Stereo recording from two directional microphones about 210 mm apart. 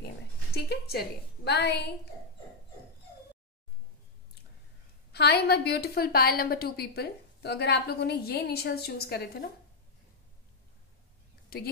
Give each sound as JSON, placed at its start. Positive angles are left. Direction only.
{"t": 0.6, "sound": "a woman's voice", "side_deg": 50}
{"t": 5.1, "sound": "a woman's voice", "side_deg": 50}